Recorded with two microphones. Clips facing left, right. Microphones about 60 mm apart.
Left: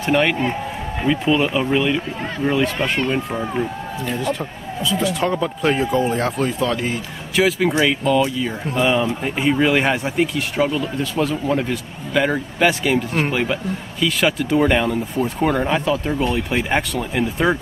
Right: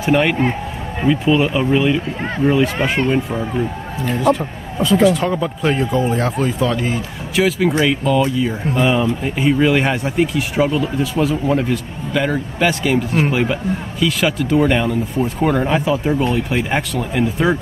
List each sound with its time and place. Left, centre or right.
0.0 s speech: centre
4.7 s speech: right
5.0 s speech: centre